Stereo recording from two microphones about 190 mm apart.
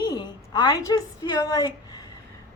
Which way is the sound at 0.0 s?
25° left (ahead or behind).